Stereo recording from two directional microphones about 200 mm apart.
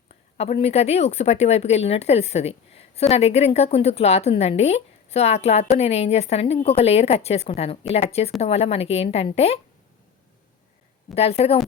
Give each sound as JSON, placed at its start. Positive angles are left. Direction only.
{"t": 0.3, "sound": "speech", "side_deg": 30}
{"t": 11.1, "sound": "speech", "side_deg": 30}